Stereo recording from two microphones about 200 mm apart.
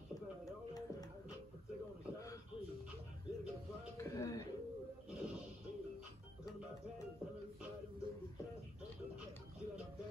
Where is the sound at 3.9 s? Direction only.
15° left (ahead or behind).